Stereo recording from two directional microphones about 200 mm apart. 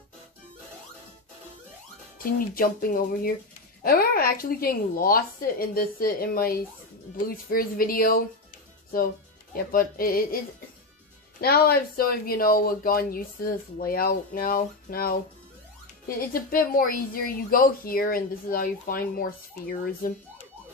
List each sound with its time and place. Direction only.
2.2 s a woman's voice: 45° left (ahead or behind)
11.4 s a woman's voice: 50° left (ahead or behind)